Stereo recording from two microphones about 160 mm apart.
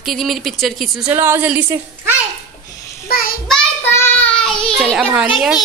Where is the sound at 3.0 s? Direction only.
65° left (ahead or behind).